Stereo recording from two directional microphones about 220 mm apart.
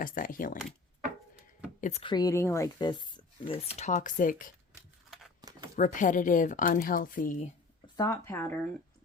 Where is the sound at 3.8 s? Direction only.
30° left (ahead or behind).